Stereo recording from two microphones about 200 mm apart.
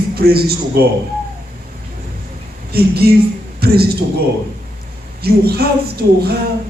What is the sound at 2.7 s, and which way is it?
A woman's voice, 50° right (ahead or behind).